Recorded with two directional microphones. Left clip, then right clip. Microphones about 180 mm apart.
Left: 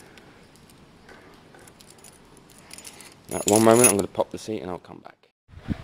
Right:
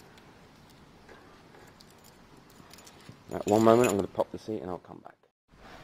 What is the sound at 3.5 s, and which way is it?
Coin, 25° left (ahead or behind).